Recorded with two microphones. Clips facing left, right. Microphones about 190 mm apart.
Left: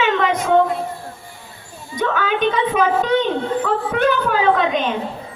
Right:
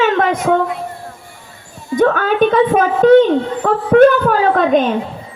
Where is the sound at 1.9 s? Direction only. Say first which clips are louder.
Right 7 dB; 45° right (ahead or behind).